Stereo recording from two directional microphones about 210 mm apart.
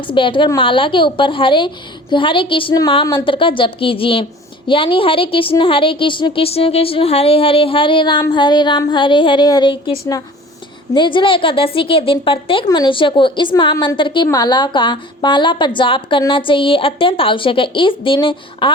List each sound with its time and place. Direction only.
0.1 s speech: 25° left (ahead or behind)